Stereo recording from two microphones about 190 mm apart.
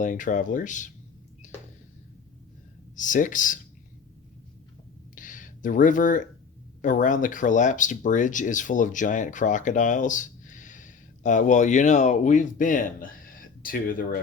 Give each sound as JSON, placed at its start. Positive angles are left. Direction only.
{"t": 0.0, "sound": "speech", "side_deg": 45}
{"t": 2.9, "sound": "speech", "side_deg": 45}
{"t": 5.1, "sound": "a sound", "side_deg": 45}
{"t": 6.8, "sound": "speech", "side_deg": 40}